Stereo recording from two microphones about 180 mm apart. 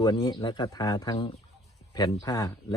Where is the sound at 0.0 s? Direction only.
25° left (ahead or behind).